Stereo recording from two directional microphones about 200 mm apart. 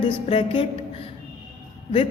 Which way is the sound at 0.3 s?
30° left (ahead or behind).